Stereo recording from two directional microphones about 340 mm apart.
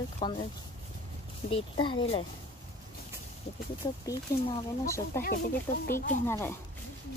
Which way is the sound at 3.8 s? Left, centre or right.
Centre.